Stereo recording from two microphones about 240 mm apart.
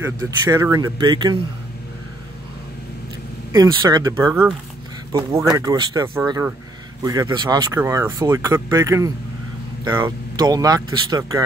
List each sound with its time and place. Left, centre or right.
0.0 s speech: centre
3.5 s speech: centre
4.3 s speech: centre
5.1 s speech: centre